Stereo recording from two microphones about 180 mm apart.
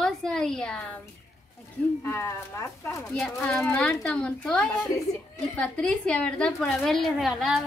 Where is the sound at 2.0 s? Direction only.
15° left (ahead or behind).